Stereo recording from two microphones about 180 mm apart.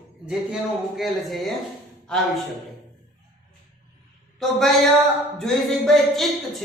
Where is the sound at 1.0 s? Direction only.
Centre (ahead or behind).